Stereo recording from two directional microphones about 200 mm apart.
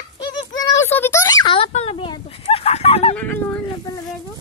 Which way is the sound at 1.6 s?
30° left (ahead or behind).